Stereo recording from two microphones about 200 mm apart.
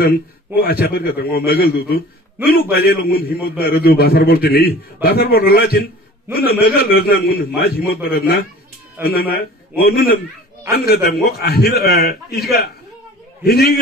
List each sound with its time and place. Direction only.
0.6 s a man's voice: 50° left (ahead or behind)